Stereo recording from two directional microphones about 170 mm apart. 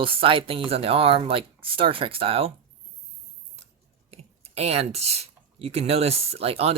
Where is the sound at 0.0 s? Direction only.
35° right (ahead or behind).